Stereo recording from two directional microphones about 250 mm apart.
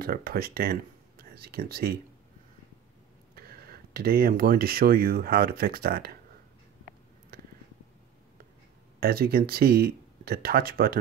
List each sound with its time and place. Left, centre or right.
0.0 s speech: right
3.3 s speech: right
9.0 s speech: right